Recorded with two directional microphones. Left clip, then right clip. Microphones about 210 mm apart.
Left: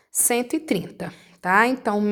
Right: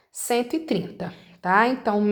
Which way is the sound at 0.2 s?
30° left (ahead or behind).